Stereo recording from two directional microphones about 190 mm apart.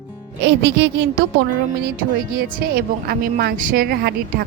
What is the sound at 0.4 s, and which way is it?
Speech, 70° right (ahead or behind).